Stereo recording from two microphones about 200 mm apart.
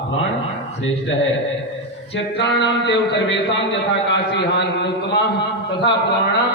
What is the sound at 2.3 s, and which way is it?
A man's voice, 60° left (ahead or behind).